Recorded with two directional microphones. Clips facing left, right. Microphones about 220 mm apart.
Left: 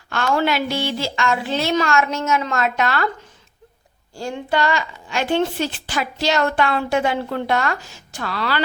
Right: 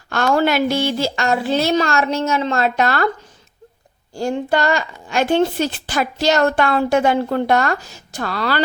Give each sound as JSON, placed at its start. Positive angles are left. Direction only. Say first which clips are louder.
{"t": 0.1, "sound": "a woman's voice", "louder": "right 3 dB", "side_deg": -45}
{"t": 4.1, "sound": "a woman's voice", "louder": "right 4 dB", "side_deg": -45}